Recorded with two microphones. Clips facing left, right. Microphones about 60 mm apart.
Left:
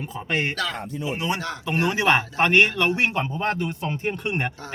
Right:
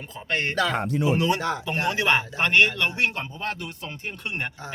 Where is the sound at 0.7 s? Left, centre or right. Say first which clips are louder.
Right 6 dB; right.